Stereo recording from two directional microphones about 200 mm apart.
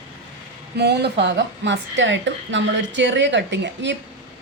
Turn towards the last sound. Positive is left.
turn(degrees=-65)  # may be behind; listen again after turning